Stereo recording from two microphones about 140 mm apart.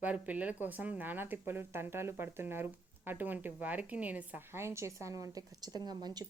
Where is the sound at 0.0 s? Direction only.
10° right (ahead or behind).